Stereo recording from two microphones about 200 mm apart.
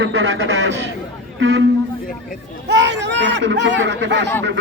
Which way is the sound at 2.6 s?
60° right (ahead or behind).